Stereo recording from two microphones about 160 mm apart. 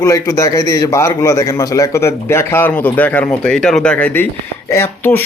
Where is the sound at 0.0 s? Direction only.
20° left (ahead or behind).